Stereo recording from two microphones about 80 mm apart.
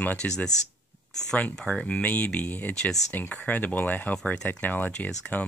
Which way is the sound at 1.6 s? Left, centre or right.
Centre.